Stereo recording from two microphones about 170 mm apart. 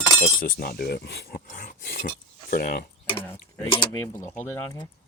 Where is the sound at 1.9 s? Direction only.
70° left (ahead or behind).